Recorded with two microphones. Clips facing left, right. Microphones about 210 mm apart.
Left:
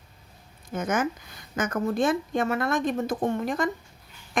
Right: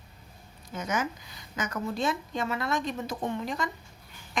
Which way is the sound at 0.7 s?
50° left (ahead or behind).